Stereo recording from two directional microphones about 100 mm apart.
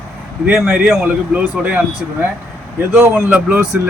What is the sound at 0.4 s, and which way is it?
Speech, 10° right (ahead or behind).